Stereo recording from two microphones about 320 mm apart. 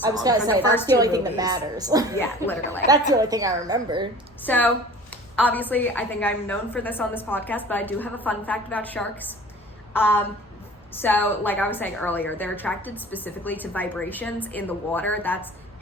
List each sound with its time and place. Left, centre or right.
0.1 s a woman's voice: centre
2.1 s speech: centre
3.1 s a woman's voice: centre
4.4 s a woman's voice: centre